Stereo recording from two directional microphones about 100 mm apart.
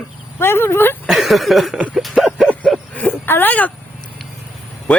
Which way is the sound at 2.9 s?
20° left (ahead or behind).